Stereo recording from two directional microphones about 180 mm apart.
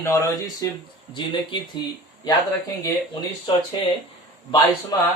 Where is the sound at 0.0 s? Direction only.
15° left (ahead or behind).